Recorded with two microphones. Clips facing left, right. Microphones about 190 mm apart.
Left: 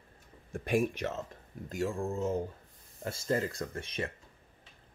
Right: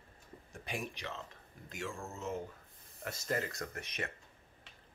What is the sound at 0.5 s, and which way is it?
Speech, 50° left (ahead or behind).